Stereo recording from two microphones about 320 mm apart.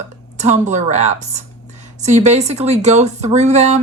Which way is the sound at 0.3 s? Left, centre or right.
Right.